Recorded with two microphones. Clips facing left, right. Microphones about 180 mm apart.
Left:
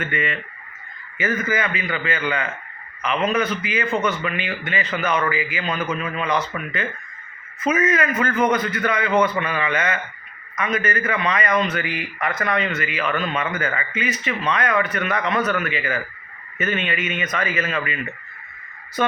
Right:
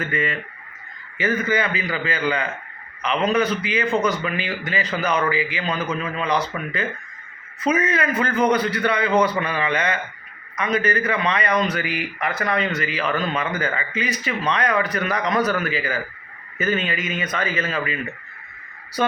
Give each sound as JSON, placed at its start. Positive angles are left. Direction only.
{"t": 0.0, "sound": "speech", "side_deg": -35}
{"t": 19.0, "sound": "speech", "side_deg": -35}